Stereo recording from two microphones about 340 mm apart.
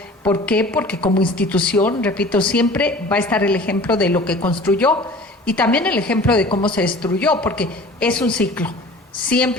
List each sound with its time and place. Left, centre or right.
0.3 s speech: centre
1.0 s speech: centre
1.4 s speech: centre
6.5 s speech: centre
6.7 s speech: centre